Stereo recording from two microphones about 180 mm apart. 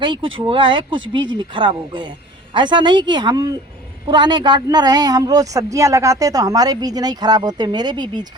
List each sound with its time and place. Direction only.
0.3 s a woman's voice: 30° right (ahead or behind)